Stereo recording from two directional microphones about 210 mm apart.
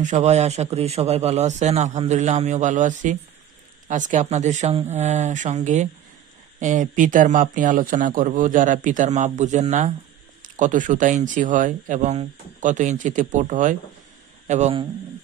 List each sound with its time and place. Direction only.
0.0 s speech: 35° right (ahead or behind)